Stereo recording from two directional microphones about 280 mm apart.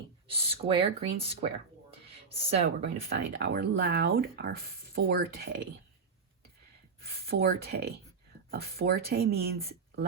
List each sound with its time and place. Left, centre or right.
0.3 s speech: centre
2.6 s speech: right
7.0 s speech: right